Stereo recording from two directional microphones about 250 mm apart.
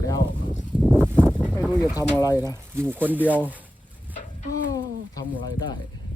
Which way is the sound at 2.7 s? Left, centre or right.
Centre.